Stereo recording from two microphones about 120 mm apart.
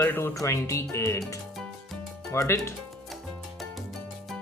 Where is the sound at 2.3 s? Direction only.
25° left (ahead or behind).